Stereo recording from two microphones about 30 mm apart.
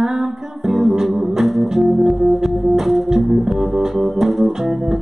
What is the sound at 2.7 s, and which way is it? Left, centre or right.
Organ, centre.